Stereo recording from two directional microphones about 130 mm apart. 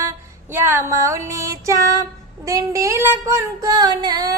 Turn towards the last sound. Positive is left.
turn(degrees=-30)  # may be behind; listen again after turning